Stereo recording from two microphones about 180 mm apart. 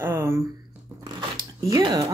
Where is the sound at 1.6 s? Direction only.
20° right (ahead or behind).